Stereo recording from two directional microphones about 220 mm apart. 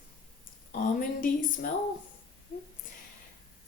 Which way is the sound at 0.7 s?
40° left (ahead or behind).